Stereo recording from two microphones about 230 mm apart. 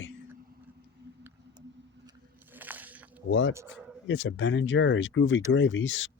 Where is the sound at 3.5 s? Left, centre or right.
Centre.